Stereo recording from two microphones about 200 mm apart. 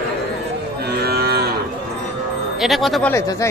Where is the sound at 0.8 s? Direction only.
55° right (ahead or behind).